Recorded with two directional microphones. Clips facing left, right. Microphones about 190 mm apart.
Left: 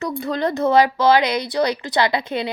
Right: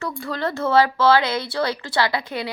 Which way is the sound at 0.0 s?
20° left (ahead or behind).